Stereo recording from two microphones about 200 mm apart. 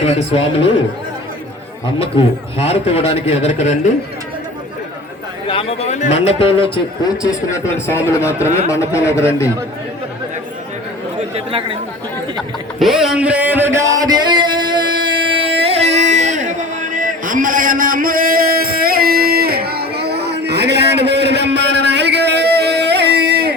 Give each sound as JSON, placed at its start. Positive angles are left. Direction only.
{"t": 0.0, "sound": "a man's voice", "side_deg": 30}
{"t": 2.0, "sound": "a man's voice", "side_deg": 30}
{"t": 5.5, "sound": "a man's voice", "side_deg": 30}
{"t": 7.2, "sound": "a man's voice", "side_deg": 15}
{"t": 11.3, "sound": "speech", "side_deg": -25}
{"t": 12.8, "sound": "a sound", "side_deg": 0}
{"t": 15.0, "sound": "music", "side_deg": -25}